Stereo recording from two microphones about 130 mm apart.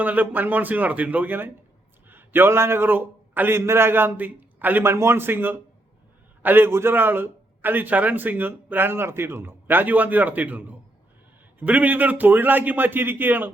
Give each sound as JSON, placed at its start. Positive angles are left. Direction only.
{"t": 0.0, "sound": "a man's voice", "side_deg": -10}